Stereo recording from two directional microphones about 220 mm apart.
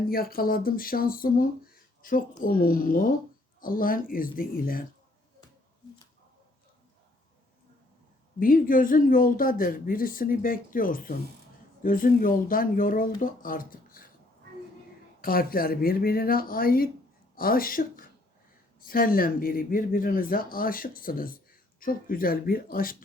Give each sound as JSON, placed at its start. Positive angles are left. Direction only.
{"t": 0.1, "sound": "speech", "side_deg": 40}
{"t": 8.4, "sound": "speech", "side_deg": 40}
{"t": 15.2, "sound": "speech", "side_deg": 40}